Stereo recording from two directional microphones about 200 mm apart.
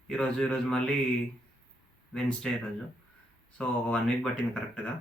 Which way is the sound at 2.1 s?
5° left (ahead or behind).